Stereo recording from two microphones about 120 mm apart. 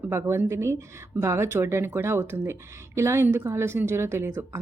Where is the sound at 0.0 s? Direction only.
20° right (ahead or behind).